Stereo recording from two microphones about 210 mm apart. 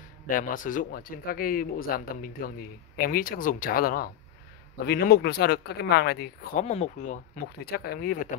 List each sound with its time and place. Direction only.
0.3 s speech: 40° left (ahead or behind)
6.6 s speech: 30° left (ahead or behind)